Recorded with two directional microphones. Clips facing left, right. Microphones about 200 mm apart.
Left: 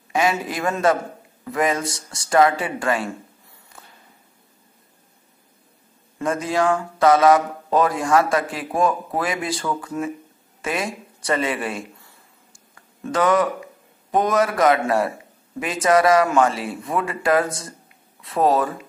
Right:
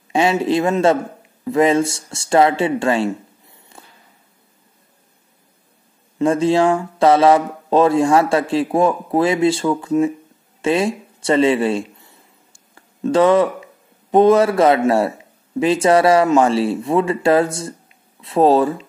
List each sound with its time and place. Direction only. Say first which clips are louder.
0.1 s a man's voice: right 6 dB; 30° right (ahead or behind)
6.1 s a man's voice: right 7 dB; 30° right (ahead or behind)
12.7 s a sound: right 8 dB; 30° right (ahead or behind)
14.1 s a man's voice: right 8 dB; 30° right (ahead or behind)